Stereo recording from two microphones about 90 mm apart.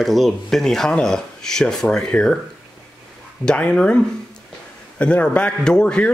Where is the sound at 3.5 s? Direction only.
10° left (ahead or behind).